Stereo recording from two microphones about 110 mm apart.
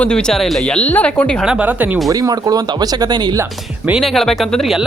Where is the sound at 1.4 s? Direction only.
15° right (ahead or behind).